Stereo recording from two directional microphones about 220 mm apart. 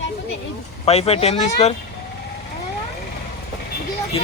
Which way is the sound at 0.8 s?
30° left (ahead or behind).